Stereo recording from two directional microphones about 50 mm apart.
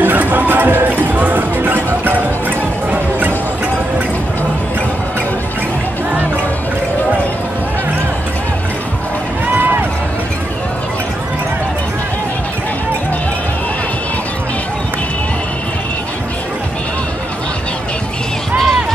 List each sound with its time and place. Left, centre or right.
0.0 s music: right
9.6 s run: right